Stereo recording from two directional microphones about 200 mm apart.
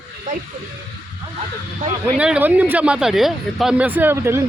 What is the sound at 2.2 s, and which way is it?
Speech, 5° right (ahead or behind).